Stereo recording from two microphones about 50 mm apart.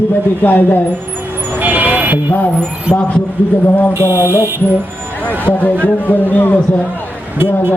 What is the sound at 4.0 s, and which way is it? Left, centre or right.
Speech, right.